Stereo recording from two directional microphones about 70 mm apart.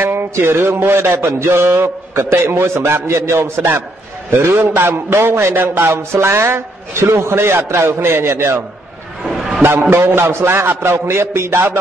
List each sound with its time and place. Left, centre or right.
0.0 s a man's voice: right
9.2 s a sound: centre
9.6 s a man's voice: right